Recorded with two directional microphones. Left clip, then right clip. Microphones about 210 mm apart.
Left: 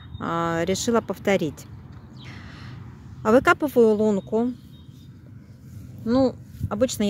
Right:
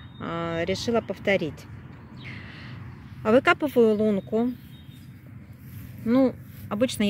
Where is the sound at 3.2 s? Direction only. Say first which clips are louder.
Left 2 dB; 15° left (ahead or behind).